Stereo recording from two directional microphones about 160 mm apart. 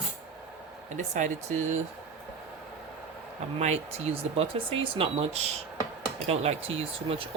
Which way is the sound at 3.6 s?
45° right (ahead or behind).